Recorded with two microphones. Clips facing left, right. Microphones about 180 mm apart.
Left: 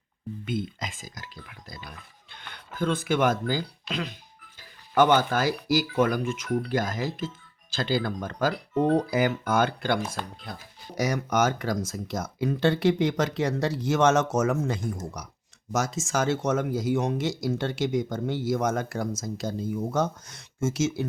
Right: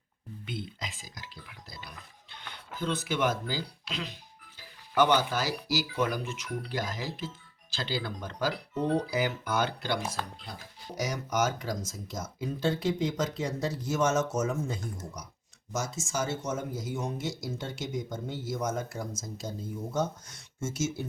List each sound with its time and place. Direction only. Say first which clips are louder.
0.4 s speech: left 7 dB; 50° left (ahead or behind); by 21.0 s 80° left